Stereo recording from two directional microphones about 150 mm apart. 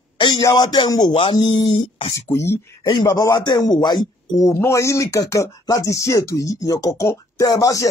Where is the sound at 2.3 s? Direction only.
20° left (ahead or behind).